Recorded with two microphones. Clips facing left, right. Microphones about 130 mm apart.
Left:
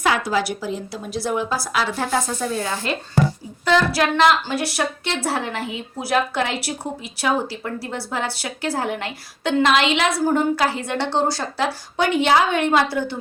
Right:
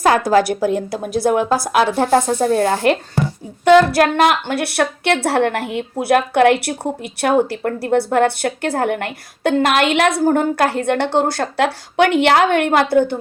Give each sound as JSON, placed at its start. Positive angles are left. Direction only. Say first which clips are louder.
{"t": 0.3, "sound": "speech", "louder": "right 8 dB", "side_deg": -50}
{"t": 3.9, "sound": "a woman's voice", "louder": "right 3 dB", "side_deg": -55}